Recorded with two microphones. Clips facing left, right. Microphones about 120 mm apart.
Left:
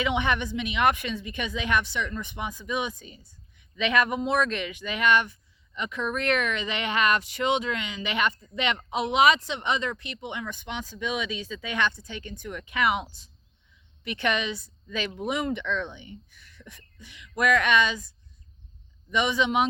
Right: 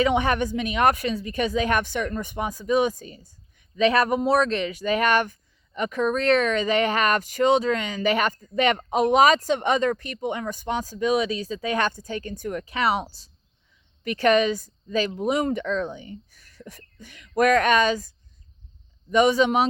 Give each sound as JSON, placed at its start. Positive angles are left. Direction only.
{"t": 0.0, "sound": "speech", "side_deg": -40}
{"t": 19.1, "sound": "speech", "side_deg": -40}